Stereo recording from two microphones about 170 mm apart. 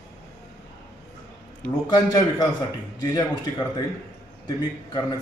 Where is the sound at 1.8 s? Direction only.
25° left (ahead or behind).